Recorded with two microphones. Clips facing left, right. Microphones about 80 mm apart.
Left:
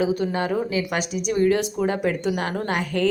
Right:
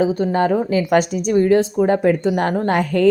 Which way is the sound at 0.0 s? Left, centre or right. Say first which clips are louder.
Right 6 dB; right.